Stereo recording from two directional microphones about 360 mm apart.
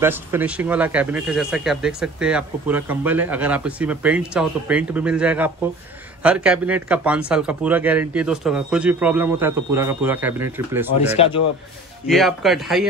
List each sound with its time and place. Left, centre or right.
0.0 s speech: centre
11.0 s speech: centre
12.1 s speech: centre